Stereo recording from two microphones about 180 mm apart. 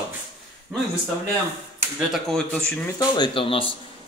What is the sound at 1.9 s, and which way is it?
Speech, centre (ahead or behind).